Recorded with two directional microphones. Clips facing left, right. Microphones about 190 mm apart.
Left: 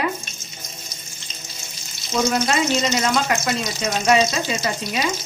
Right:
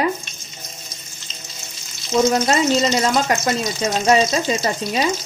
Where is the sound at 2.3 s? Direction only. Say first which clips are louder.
Right 3 dB; 40° right (ahead or behind).